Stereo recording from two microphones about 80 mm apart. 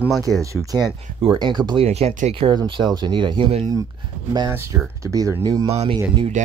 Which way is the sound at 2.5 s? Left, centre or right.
Right.